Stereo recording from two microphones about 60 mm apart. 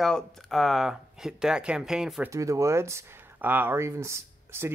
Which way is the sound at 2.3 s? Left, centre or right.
Right.